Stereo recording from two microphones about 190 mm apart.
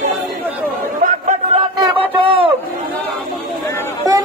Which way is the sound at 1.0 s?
40° right (ahead or behind).